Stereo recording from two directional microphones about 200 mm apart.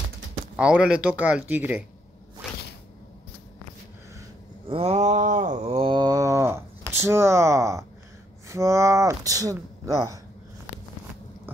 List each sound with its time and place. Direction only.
0.6 s speech: 5° right (ahead or behind)
4.6 s a sound: 30° right (ahead or behind)
8.5 s speech: 15° right (ahead or behind)